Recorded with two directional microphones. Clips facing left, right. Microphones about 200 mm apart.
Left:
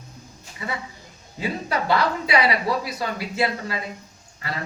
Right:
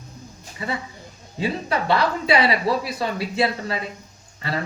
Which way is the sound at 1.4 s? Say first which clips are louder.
Right 2 dB; 30° right (ahead or behind).